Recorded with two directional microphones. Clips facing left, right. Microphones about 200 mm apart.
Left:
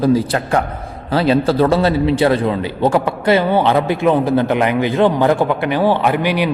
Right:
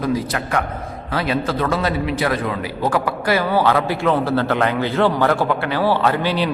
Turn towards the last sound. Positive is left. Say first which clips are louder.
# left 3 dB
turn(degrees=15)  # may be behind; listen again after turning